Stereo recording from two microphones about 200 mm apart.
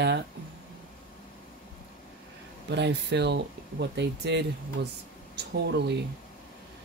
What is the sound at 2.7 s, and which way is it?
Speech, 60° right (ahead or behind).